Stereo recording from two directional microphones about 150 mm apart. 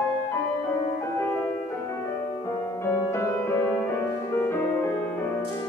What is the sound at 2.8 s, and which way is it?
Music, 20° left (ahead or behind).